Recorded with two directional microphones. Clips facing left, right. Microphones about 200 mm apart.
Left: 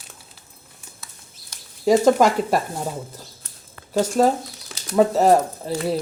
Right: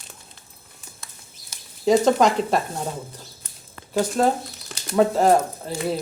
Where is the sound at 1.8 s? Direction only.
5° left (ahead or behind).